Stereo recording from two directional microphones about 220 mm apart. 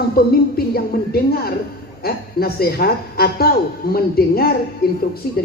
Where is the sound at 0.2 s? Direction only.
45° left (ahead or behind).